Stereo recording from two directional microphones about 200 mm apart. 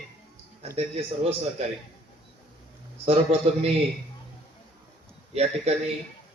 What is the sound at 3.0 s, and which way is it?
Speech, 30° right (ahead or behind).